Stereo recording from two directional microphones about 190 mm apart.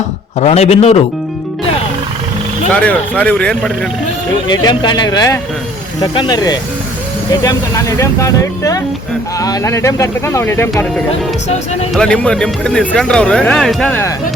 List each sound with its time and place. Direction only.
0.3 s speech: 35° left (ahead or behind)
2.7 s speech: 5° left (ahead or behind)
4.4 s speech: 20° left (ahead or behind)
11.1 s speech: 35° left (ahead or behind)
11.9 s speech: 5° left (ahead or behind)